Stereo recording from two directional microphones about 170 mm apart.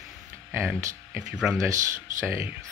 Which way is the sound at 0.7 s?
20° right (ahead or behind).